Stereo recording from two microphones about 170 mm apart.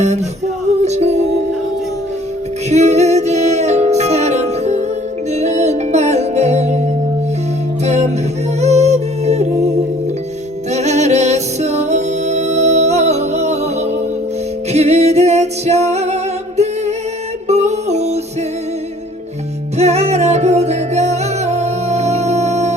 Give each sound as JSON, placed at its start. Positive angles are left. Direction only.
{"t": 0.8, "sound": "music", "side_deg": -40}
{"t": 2.6, "sound": "music", "side_deg": -40}
{"t": 7.9, "sound": "music", "side_deg": -40}
{"t": 10.7, "sound": "music", "side_deg": -40}
{"t": 14.7, "sound": "music", "side_deg": -40}
{"t": 17.5, "sound": "music", "side_deg": -40}
{"t": 19.7, "sound": "music", "side_deg": -40}